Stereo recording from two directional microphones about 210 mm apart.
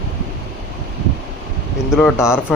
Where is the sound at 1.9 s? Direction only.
5° left (ahead or behind).